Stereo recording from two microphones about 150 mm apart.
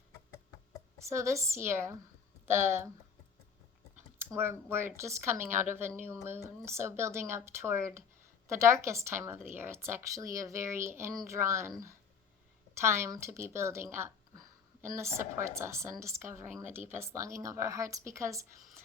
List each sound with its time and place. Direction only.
0.9 s a woman's voice: 20° right (ahead or behind)
4.2 s a woman's voice: 15° right (ahead or behind)
14.9 s a woman's voice: 15° right (ahead or behind)